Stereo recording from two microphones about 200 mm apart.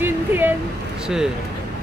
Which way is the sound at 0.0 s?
10° right (ahead or behind).